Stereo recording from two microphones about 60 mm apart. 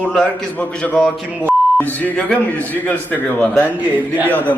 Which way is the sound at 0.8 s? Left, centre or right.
Left.